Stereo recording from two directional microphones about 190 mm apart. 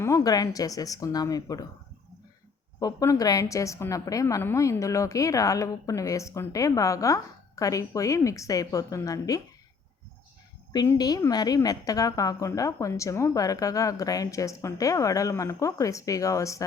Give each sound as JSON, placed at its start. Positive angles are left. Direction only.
{"t": 0.0, "sound": "speech", "side_deg": 15}
{"t": 2.7, "sound": "a woman's voice", "side_deg": 15}
{"t": 10.7, "sound": "a woman's voice", "side_deg": 20}